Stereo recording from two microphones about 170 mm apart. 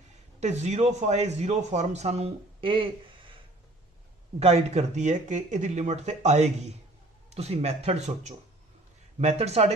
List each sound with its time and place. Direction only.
0.4 s a man's voice: 45° right (ahead or behind)
4.4 s a man's voice: 40° right (ahead or behind)